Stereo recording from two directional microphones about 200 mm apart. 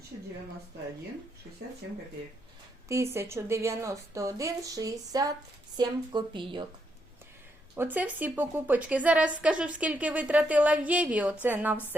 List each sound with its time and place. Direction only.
2.9 s a woman's voice: 15° right (ahead or behind)
7.8 s a woman's voice: 10° right (ahead or behind)